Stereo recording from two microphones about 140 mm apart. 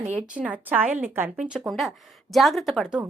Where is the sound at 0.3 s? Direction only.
10° right (ahead or behind).